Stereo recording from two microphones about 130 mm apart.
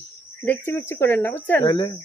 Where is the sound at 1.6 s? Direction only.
35° left (ahead or behind).